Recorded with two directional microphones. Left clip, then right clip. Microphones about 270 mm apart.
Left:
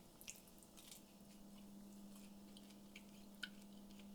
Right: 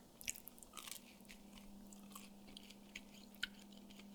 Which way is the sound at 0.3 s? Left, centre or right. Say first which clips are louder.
Right 10 dB; right.